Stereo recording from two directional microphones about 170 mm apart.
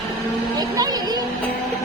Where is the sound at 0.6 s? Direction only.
20° right (ahead or behind).